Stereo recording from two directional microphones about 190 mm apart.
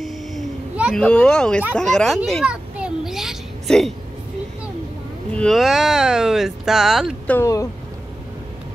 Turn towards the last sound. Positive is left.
turn(degrees=15)  # may be behind; listen again after turning